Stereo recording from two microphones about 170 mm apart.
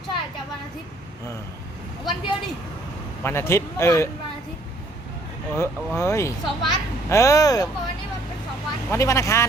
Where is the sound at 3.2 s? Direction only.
15° left (ahead or behind).